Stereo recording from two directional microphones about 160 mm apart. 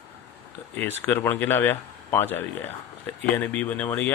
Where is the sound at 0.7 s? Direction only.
15° left (ahead or behind).